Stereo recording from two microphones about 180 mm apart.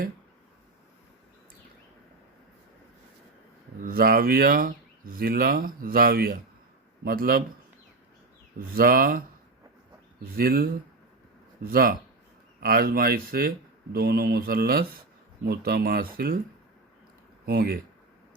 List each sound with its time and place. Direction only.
3.8 s speech: 55° right (ahead or behind)
8.5 s speech: 55° right (ahead or behind)
10.3 s speech: 55° right (ahead or behind)
17.4 s speech: 60° right (ahead or behind)